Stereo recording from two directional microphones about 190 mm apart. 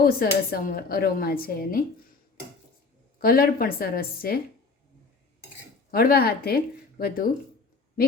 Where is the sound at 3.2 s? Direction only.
50° left (ahead or behind).